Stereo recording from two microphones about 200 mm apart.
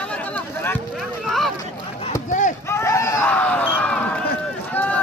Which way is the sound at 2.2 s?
40° left (ahead or behind).